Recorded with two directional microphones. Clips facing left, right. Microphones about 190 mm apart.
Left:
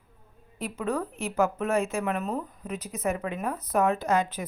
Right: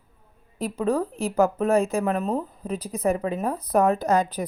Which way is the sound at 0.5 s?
35° right (ahead or behind).